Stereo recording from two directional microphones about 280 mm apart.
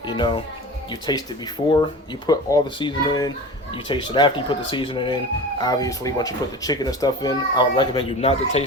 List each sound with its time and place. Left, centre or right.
0.1 s speech: centre
2.2 s speech: centre